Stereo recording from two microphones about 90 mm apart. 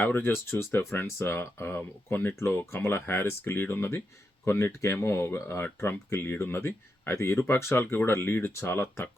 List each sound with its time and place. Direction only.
0.0 s speech: 20° left (ahead or behind)